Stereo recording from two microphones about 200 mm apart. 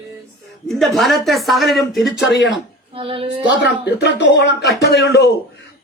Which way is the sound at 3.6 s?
60° left (ahead or behind).